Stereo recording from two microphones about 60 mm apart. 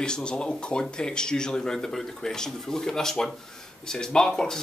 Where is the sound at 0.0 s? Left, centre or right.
Centre.